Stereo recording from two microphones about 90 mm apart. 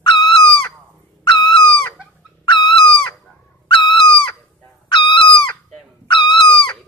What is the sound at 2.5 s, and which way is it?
Owl, 65° left (ahead or behind).